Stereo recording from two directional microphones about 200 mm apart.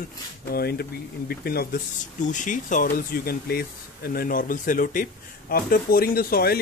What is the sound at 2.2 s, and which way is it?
Speech, 40° left (ahead or behind).